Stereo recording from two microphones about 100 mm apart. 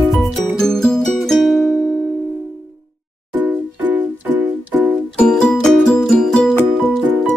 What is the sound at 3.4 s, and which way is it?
Music, 15° right (ahead or behind).